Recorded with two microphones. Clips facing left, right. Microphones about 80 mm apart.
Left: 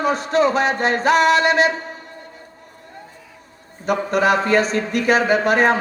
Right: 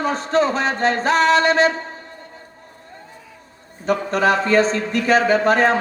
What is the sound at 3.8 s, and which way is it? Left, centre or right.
A man's voice, right.